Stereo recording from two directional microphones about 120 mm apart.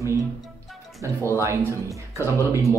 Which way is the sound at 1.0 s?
25° right (ahead or behind).